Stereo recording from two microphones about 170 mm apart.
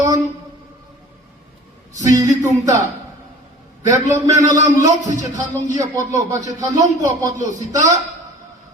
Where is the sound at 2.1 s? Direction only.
20° right (ahead or behind).